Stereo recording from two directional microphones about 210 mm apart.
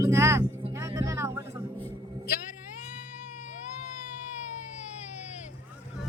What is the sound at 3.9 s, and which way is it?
Baby cry, 35° left (ahead or behind).